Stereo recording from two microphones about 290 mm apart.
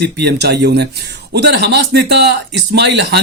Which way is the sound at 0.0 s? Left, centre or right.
Right.